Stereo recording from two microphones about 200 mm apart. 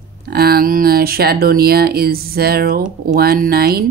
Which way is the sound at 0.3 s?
50° right (ahead or behind).